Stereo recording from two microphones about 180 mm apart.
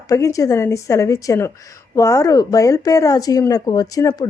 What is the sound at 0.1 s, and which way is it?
A woman's voice, 15° left (ahead or behind).